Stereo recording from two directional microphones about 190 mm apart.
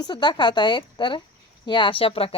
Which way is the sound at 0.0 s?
25° left (ahead or behind).